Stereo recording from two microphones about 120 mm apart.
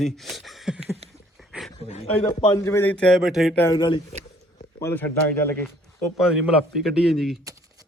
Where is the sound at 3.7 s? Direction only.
40° left (ahead or behind).